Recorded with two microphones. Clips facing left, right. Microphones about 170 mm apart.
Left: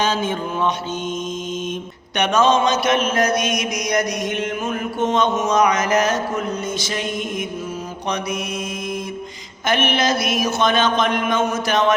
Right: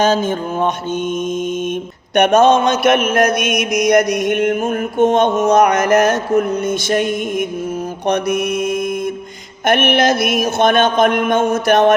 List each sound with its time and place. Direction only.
0.0 s mantra: 45° right (ahead or behind)
2.1 s mantra: 55° right (ahead or behind)
9.6 s mantra: 60° right (ahead or behind)